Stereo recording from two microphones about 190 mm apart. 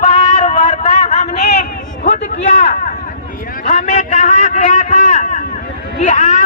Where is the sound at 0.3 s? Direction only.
45° left (ahead or behind).